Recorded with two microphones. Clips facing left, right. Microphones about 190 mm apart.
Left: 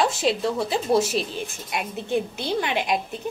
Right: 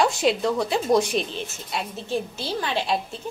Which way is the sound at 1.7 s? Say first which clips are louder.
Left 2 dB; 15° left (ahead or behind).